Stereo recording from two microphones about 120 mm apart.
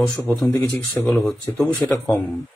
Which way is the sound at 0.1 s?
5° left (ahead or behind).